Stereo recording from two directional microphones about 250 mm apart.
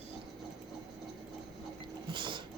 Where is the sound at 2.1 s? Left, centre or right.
Centre.